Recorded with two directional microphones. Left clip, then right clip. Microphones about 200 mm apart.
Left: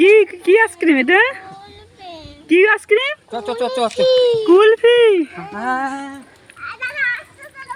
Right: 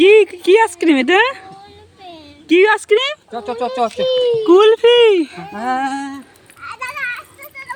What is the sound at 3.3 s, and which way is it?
Speech, 35° left (ahead or behind).